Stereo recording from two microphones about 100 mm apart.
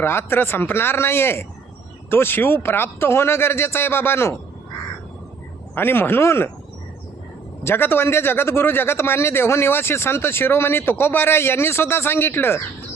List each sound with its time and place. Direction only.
0.0 s a man's voice: 25° left (ahead or behind)
5.7 s a man's voice: 20° left (ahead or behind)
7.6 s a man's voice: 20° left (ahead or behind)